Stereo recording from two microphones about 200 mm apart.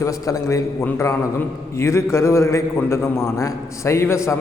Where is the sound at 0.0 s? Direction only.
15° left (ahead or behind).